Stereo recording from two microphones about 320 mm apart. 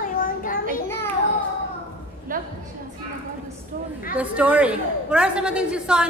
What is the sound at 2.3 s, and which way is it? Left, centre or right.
Speech, right.